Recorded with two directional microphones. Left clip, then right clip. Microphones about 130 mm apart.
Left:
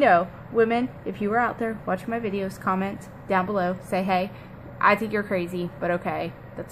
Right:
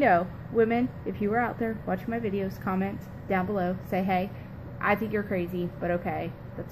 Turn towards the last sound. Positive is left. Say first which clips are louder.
# left 4 dB
turn(degrees=30)  # may be behind; listen again after turning